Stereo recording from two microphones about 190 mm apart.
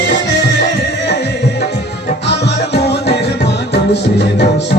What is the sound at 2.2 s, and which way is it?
Music, 65° left (ahead or behind).